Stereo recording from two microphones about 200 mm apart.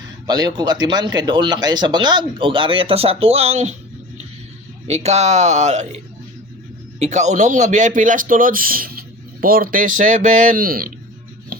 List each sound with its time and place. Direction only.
0.3 s speech: 20° right (ahead or behind)
4.9 s a man's voice: 30° right (ahead or behind)
7.0 s a man's voice: 35° right (ahead or behind)